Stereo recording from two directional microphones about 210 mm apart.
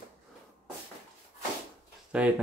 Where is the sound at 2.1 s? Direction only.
5° right (ahead or behind).